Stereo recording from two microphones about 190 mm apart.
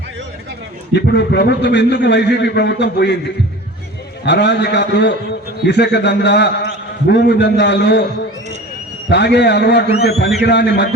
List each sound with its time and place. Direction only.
0.9 s a man's voice: 60° left (ahead or behind)
4.3 s a man's voice: 65° left (ahead or behind)
9.0 s a man's voice: 65° left (ahead or behind)